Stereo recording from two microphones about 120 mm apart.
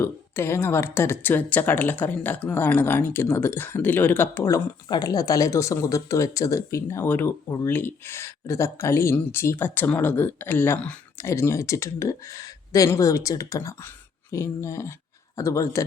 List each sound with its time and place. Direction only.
0.0 s speech: 20° left (ahead or behind)